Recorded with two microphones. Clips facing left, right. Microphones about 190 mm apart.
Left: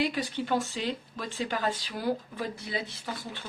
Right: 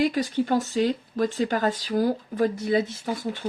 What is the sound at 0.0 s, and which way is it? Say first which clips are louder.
Speech: right 7 dB; 45° right (ahead or behind).